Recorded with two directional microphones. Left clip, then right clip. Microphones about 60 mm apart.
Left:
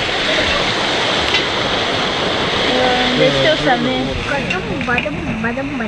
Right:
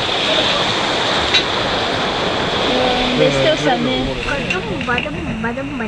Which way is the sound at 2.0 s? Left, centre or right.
Left.